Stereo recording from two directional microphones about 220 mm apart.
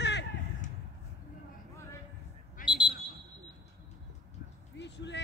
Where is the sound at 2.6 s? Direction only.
20° left (ahead or behind).